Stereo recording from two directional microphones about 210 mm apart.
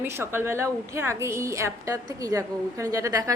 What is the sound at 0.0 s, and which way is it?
A woman's voice, 10° right (ahead or behind).